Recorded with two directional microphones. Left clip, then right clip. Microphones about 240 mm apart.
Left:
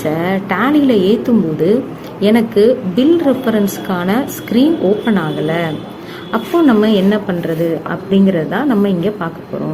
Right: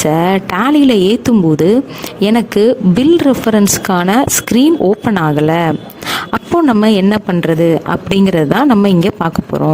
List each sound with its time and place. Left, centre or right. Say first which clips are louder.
0.1 s a woman's voice: right 2 dB; right